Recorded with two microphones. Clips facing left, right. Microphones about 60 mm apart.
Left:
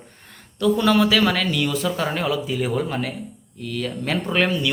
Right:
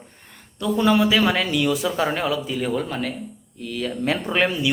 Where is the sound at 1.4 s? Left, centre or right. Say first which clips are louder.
Right 1 dB; centre.